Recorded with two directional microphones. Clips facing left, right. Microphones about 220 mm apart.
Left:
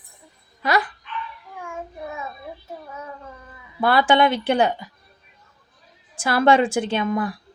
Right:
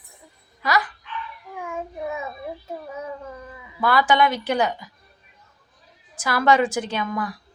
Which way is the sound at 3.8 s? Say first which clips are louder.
Left 2 dB; 30° left (ahead or behind).